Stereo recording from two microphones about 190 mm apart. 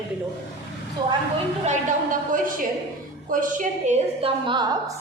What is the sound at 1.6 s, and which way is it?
A woman's voice, 45° right (ahead or behind).